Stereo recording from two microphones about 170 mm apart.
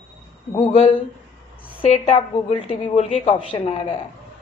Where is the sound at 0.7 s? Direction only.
35° left (ahead or behind).